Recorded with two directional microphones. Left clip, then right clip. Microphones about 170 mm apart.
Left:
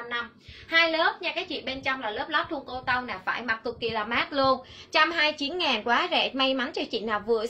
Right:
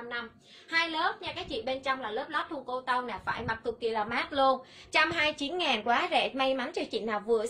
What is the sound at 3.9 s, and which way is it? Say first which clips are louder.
A woman's voice: left 4 dB; 15° right (ahead or behind).